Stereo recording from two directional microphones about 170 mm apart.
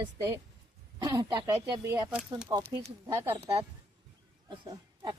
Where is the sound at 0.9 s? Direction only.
20° right (ahead or behind).